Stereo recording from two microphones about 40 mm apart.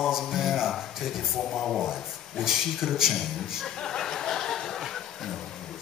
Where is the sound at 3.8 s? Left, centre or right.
Centre.